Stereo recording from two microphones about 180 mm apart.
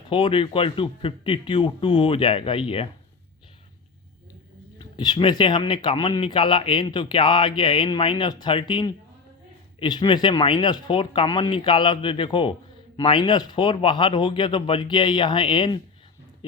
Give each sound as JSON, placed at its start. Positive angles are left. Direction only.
{"t": 0.1, "sound": "speech", "side_deg": 30}
{"t": 4.8, "sound": "speech", "side_deg": 25}